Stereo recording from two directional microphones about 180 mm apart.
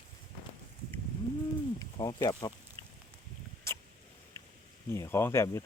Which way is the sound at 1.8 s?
20° left (ahead or behind).